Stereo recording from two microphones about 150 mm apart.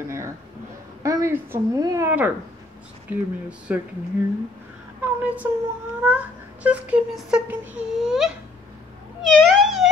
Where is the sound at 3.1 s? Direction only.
10° right (ahead or behind).